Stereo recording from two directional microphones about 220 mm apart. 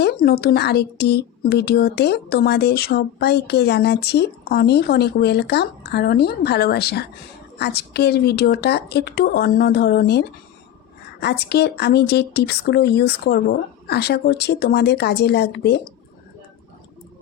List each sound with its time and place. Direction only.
0.0 s speech: 45° left (ahead or behind)